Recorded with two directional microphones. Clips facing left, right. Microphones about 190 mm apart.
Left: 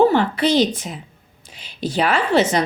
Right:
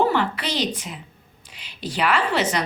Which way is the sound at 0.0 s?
30° left (ahead or behind).